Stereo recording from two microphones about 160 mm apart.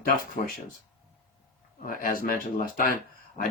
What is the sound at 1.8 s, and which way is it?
Speech, 60° left (ahead or behind).